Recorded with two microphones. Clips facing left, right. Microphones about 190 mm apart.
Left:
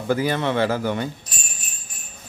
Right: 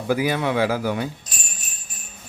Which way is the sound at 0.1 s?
10° right (ahead or behind).